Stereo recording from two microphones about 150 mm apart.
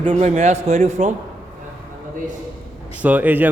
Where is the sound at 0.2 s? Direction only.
50° right (ahead or behind).